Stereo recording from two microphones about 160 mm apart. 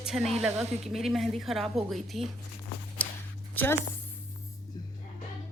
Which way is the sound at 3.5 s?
10° left (ahead or behind).